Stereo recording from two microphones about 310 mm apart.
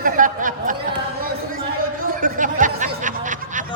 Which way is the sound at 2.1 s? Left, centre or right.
Right.